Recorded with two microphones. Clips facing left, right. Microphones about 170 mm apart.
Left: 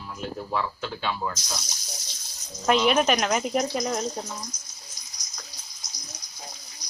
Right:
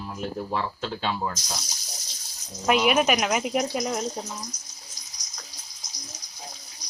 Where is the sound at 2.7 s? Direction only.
10° right (ahead or behind).